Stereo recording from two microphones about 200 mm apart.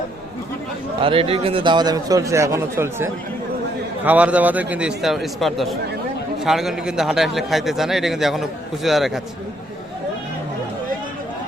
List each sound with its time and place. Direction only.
1.0 s a man's voice: 25° right (ahead or behind); by 9.2 s centre (ahead or behind)